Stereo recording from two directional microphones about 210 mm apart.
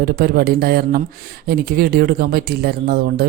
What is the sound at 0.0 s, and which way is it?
Speech, 45° right (ahead or behind).